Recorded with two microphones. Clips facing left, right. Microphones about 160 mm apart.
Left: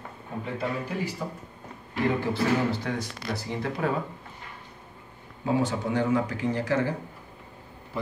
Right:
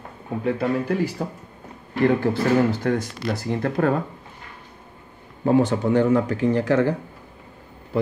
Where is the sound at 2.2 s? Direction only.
50° right (ahead or behind).